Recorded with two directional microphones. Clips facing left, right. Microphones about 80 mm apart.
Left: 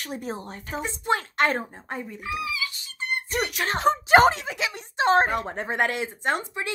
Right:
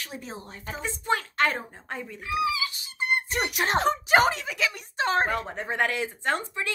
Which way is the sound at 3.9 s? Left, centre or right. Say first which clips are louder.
Left 8 dB; left.